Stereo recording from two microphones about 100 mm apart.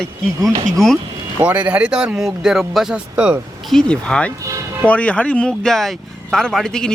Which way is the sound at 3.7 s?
10° left (ahead or behind).